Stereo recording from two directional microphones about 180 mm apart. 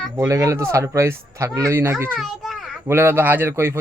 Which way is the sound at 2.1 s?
Centre (ahead or behind).